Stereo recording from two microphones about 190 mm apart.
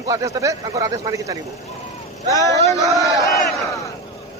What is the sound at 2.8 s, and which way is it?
Speech, 15° right (ahead or behind).